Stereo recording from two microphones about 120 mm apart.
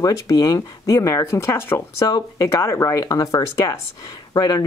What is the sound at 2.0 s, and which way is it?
Speech, 30° left (ahead or behind).